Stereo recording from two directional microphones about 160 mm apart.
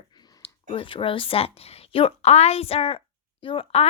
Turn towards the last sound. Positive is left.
turn(degrees=35)  # may be behind; listen again after turning